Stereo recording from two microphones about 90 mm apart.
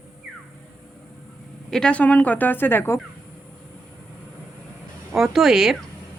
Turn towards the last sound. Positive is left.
turn(degrees=-5)  # may be behind; listen again after turning